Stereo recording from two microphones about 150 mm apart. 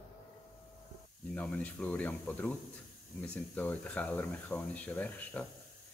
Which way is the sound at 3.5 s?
10° left (ahead or behind).